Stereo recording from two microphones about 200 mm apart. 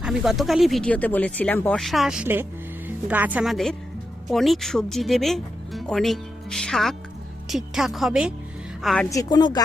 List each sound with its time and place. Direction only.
0.0 s a woman's voice: 5° right (ahead or behind)
9.0 s speech: 20° left (ahead or behind)